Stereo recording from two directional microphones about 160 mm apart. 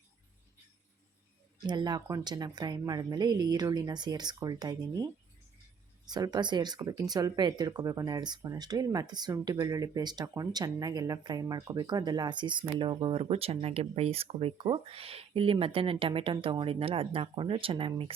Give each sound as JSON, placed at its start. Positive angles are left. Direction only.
{"t": 1.5, "sound": "speech", "side_deg": -25}
{"t": 6.1, "sound": "speech", "side_deg": -25}